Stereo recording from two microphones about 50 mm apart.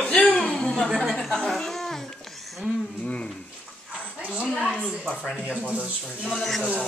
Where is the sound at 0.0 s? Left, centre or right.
Left.